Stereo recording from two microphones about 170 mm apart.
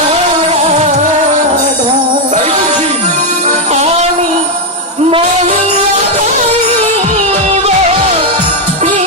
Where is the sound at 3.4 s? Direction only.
40° right (ahead or behind).